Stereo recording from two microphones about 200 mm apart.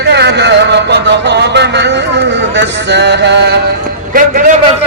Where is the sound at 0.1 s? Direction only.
60° right (ahead or behind).